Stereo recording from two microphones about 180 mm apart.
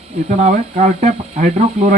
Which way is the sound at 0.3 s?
40° right (ahead or behind).